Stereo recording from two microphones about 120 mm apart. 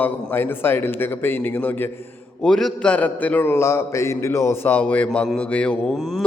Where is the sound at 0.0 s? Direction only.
15° left (ahead or behind).